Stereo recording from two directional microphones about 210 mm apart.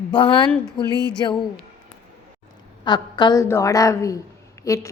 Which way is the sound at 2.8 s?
20° left (ahead or behind).